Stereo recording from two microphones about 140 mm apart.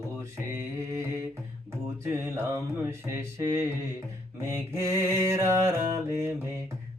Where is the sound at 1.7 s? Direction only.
20° right (ahead or behind).